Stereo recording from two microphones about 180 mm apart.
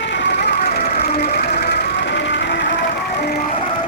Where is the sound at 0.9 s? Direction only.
35° left (ahead or behind).